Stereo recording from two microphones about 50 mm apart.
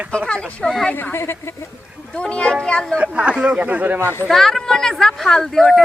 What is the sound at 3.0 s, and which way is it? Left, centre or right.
Speech, right.